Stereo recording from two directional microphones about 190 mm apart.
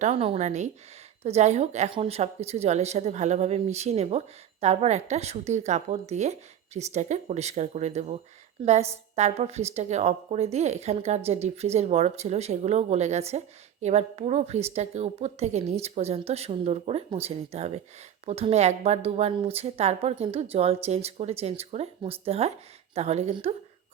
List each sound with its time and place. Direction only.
0.0 s a woman's voice: 35° right (ahead or behind)